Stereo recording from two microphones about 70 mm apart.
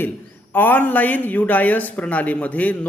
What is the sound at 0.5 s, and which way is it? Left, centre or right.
Speech, left.